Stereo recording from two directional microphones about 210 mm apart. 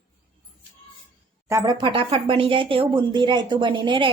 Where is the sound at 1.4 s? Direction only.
15° right (ahead or behind).